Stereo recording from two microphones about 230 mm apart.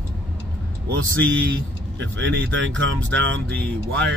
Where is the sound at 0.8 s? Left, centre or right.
Right.